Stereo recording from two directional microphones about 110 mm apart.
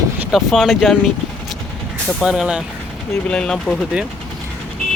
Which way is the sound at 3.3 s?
10° left (ahead or behind).